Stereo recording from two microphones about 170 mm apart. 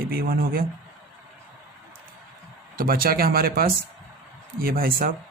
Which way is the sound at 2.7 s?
60° right (ahead or behind).